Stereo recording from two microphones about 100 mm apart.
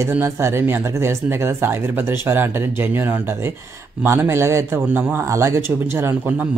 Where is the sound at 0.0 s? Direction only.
25° right (ahead or behind).